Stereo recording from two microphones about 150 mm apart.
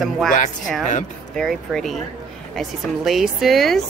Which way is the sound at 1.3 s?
Centre (ahead or behind).